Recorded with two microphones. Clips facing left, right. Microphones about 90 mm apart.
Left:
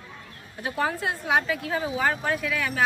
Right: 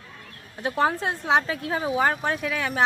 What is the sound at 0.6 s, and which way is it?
A woman's voice, 30° right (ahead or behind).